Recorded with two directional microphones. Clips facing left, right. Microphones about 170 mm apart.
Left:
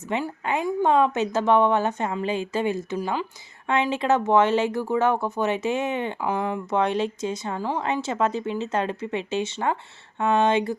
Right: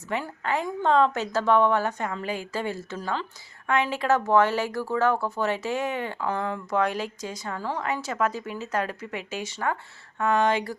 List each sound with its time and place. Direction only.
0.1 s speech: 20° left (ahead or behind)